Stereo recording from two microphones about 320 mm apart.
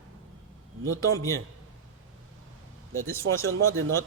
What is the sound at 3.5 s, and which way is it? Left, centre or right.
Speech, right.